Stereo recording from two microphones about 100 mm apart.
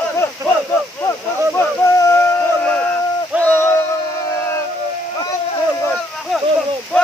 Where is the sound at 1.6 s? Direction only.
20° left (ahead or behind).